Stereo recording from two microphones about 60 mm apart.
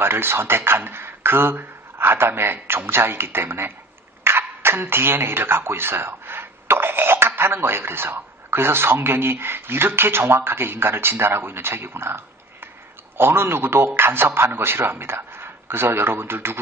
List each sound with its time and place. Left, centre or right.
0.0 s a man's voice: right